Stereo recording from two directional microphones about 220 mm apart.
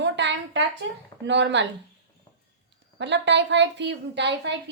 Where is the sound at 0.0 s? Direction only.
55° right (ahead or behind).